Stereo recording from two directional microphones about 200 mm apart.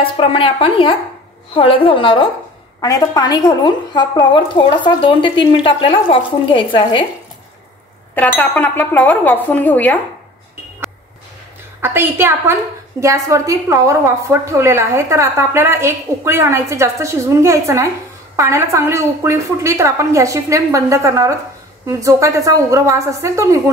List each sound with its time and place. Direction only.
0.0 s a woman's voice: 25° left (ahead or behind)
8.4 s speech: 10° left (ahead or behind)
11.8 s a woman's voice: 10° right (ahead or behind)